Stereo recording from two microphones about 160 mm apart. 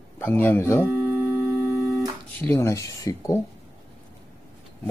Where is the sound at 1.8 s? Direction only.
Centre (ahead or behind).